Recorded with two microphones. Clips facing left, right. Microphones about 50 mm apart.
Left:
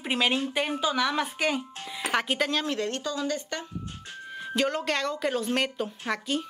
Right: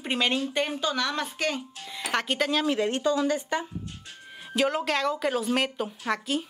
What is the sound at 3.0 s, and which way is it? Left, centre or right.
A woman's voice, right.